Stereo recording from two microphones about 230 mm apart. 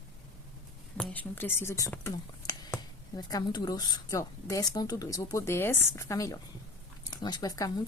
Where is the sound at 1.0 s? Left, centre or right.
Centre.